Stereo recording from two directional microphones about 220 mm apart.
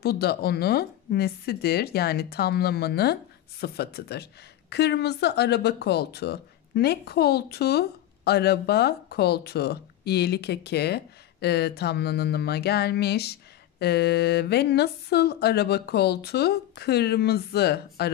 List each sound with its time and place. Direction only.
0.0 s a woman's voice: 45° left (ahead or behind)